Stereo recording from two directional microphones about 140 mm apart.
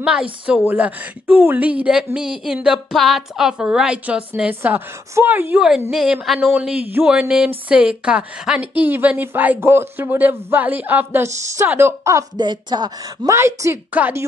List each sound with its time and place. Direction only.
0.0 s speech: 10° right (ahead or behind)